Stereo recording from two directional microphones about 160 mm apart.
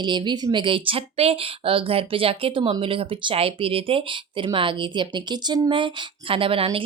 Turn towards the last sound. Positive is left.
turn(degrees=-35)  # may be behind; listen again after turning